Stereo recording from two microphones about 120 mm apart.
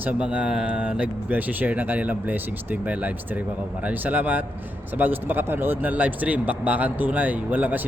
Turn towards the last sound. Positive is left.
turn(degrees=-15)  # may be behind; listen again after turning